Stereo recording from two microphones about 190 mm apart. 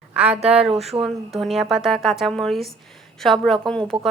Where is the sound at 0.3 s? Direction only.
35° right (ahead or behind).